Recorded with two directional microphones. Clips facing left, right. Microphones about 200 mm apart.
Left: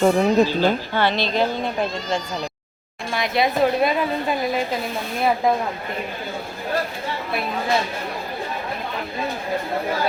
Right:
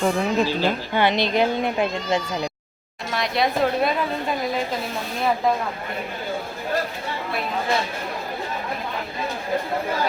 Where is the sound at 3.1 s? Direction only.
Centre (ahead or behind).